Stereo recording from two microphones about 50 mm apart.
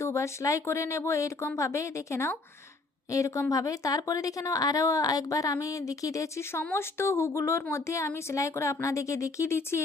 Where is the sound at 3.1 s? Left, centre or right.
Left.